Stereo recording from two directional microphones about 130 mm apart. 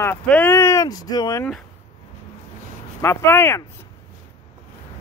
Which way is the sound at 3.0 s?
20° left (ahead or behind).